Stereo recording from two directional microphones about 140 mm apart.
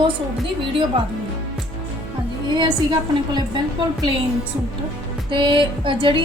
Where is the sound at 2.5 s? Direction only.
30° right (ahead or behind).